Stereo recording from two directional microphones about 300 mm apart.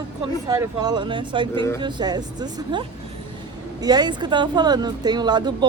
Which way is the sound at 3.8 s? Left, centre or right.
Centre.